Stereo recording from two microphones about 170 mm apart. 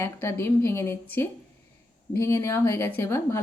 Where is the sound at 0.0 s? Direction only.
15° left (ahead or behind).